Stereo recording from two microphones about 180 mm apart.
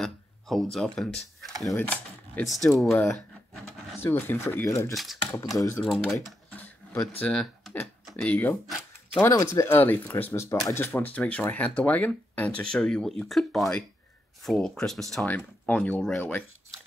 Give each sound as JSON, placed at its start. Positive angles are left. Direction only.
{"t": 0.0, "sound": "speech", "side_deg": 0}
{"t": 4.9, "sound": "speech", "side_deg": 0}
{"t": 5.3, "sound": "speech", "side_deg": 20}
{"t": 6.5, "sound": "a sound", "side_deg": 10}
{"t": 7.2, "sound": "speech", "side_deg": 5}
{"t": 8.6, "sound": "a sound", "side_deg": 5}
{"t": 9.3, "sound": "speech", "side_deg": 15}